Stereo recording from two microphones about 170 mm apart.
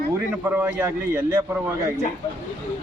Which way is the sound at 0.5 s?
10° right (ahead or behind).